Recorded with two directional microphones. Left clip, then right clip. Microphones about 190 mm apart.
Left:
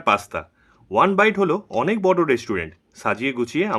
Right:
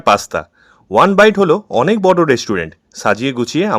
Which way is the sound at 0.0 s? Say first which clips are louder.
Right 7 dB; 40° right (ahead or behind).